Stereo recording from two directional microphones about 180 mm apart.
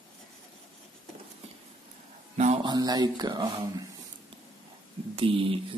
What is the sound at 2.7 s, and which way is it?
Speech, 20° right (ahead or behind).